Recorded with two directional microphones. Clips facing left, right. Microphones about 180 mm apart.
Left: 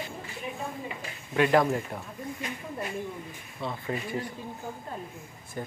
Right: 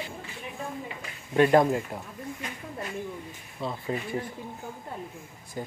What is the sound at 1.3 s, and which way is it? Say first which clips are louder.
Speech: right 3 dB; 25° right (ahead or behind).